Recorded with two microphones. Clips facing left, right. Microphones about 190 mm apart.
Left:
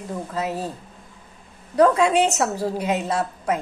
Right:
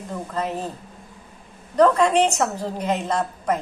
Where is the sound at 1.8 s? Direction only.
10° left (ahead or behind).